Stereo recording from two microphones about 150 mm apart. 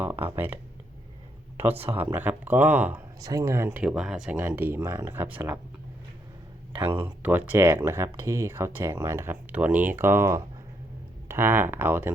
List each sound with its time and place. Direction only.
0.0 s speech: 15° right (ahead or behind)
1.9 s speech: 15° right (ahead or behind)
3.2 s speech: 25° right (ahead or behind)
3.7 s speech: 5° right (ahead or behind)
7.0 s speech: 15° right (ahead or behind)